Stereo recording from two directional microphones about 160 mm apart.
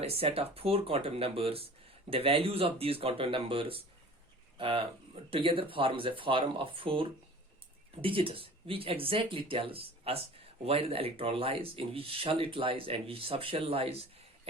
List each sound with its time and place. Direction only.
0.0 s speech: 35° right (ahead or behind)